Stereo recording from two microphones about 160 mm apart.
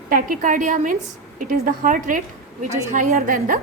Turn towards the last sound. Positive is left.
turn(degrees=-55)  # may be behind; listen again after turning